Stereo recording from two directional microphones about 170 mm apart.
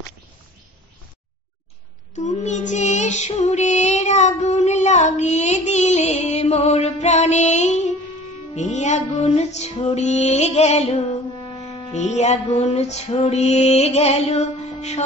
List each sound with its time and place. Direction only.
2.1 s music: 45° left (ahead or behind)